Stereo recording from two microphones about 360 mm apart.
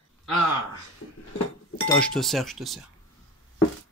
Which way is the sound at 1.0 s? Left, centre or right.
Left.